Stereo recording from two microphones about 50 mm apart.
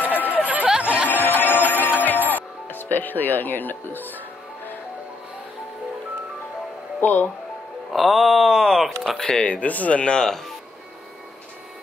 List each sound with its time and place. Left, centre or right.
0.0 s a sound: left
0.4 s a sound: right
1.0 s music: left
7.0 s speech: left
7.9 s speech: centre
9.4 s speech: left